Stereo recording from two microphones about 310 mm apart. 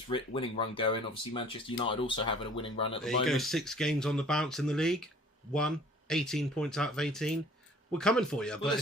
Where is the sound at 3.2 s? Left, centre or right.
Centre.